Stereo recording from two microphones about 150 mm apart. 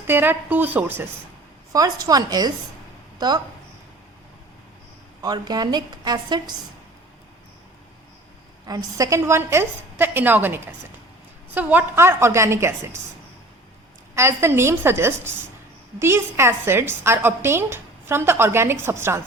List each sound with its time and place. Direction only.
0.1 s a woman's voice: 15° right (ahead or behind)
1.7 s a woman's voice: 25° right (ahead or behind)
5.2 s a woman's voice: 25° right (ahead or behind)
8.6 s a woman's voice: 25° right (ahead or behind)
14.2 s a woman's voice: 15° right (ahead or behind)